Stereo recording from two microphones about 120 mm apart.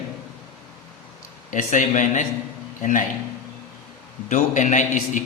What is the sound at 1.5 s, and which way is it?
Speech, 90° left.